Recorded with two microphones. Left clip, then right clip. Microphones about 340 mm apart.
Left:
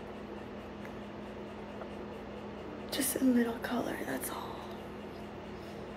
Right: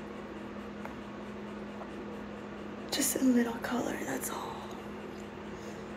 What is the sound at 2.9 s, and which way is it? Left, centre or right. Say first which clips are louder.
Speech: right 2 dB; centre.